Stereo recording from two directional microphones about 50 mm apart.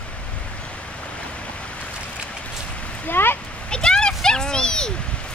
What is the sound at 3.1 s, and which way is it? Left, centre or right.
Speech, left.